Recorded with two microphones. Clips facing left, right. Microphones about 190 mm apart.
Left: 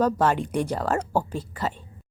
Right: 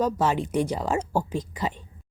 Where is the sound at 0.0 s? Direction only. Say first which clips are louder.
Left 2 dB; 10° right (ahead or behind).